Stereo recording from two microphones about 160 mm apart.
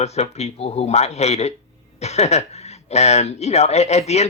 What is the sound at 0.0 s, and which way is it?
Speech, 40° left (ahead or behind).